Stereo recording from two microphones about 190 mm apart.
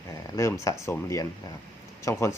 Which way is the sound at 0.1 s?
15° left (ahead or behind).